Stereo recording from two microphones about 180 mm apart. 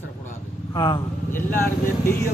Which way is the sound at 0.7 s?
25° left (ahead or behind).